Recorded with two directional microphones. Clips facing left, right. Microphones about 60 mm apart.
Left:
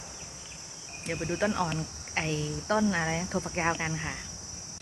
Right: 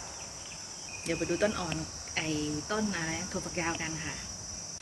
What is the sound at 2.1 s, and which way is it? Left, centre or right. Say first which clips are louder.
Speech: left 1 dB; left.